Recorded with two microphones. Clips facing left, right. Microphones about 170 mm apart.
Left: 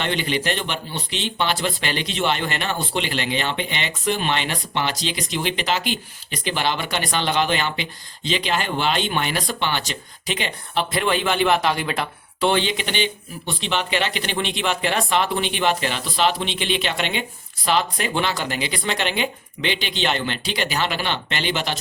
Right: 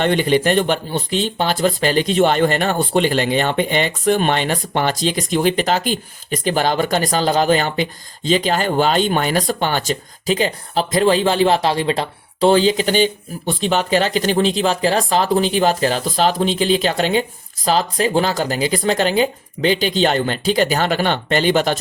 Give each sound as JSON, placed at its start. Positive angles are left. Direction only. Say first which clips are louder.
{"t": 0.0, "sound": "speech", "louder": "right 8 dB", "side_deg": -50}